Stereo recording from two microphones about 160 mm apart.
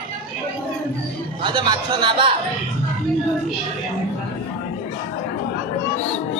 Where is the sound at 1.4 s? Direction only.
30° right (ahead or behind).